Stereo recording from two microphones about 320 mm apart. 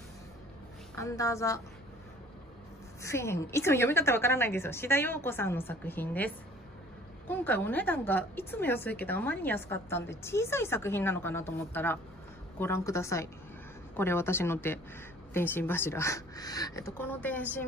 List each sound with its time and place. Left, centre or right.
0.9 s a woman's voice: centre
3.0 s a woman's voice: centre